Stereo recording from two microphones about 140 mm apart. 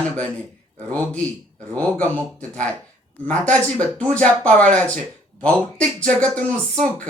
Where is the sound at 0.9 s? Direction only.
10° left (ahead or behind).